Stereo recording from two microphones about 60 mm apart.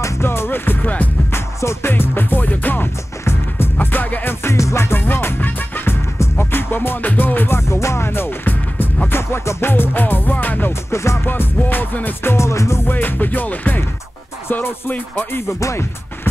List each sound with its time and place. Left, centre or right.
0.0 s music: left
1.3 s music: left
4.6 s music: left
4.9 s music: left
7.5 s music: left
10.9 s music: left
11.2 s music: left
12.9 s music: left